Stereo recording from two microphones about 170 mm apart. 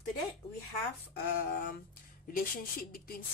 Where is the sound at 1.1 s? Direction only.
60° left (ahead or behind).